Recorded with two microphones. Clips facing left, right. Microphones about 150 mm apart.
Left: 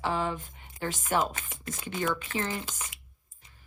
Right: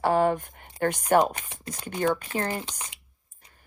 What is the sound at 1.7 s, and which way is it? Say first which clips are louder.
Speech: right 5 dB; 40° right (ahead or behind).